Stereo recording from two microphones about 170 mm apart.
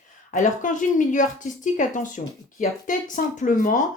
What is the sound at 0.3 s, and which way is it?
Speech, 50° left (ahead or behind).